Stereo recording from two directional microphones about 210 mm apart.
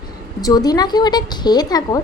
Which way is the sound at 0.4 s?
20° left (ahead or behind).